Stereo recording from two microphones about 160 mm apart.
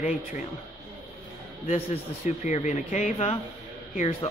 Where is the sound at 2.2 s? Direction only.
45° left (ahead or behind).